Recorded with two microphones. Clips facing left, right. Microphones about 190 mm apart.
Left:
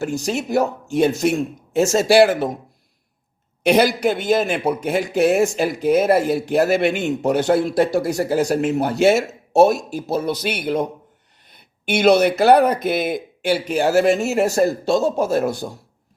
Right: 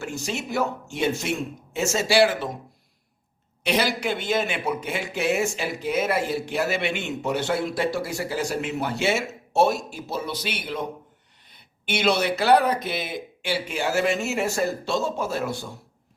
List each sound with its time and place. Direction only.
0.0 s speech: 40° left (ahead or behind)
3.6 s a man's voice: 45° left (ahead or behind)
11.9 s speech: 45° left (ahead or behind)